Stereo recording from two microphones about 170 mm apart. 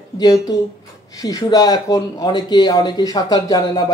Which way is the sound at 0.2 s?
20° left (ahead or behind).